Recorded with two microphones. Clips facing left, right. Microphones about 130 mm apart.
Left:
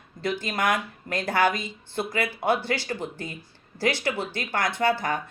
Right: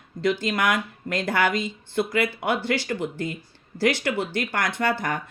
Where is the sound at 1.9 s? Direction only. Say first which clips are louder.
Right 4 dB; 30° left (ahead or behind).